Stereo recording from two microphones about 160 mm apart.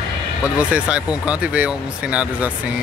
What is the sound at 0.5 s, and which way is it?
Speech, 10° right (ahead or behind).